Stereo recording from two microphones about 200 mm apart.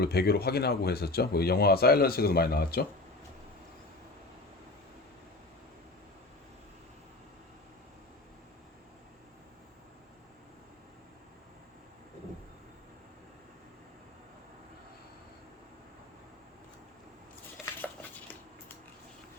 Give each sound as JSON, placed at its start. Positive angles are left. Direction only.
{"t": 0.0, "sound": "speech", "side_deg": 50}
{"t": 17.6, "sound": "dishes", "side_deg": -5}